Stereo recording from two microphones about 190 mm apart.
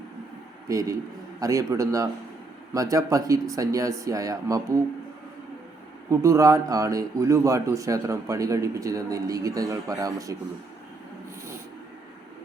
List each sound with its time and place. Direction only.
0.7 s a man's voice: 20° right (ahead or behind)
6.1 s a man's voice: 15° right (ahead or behind)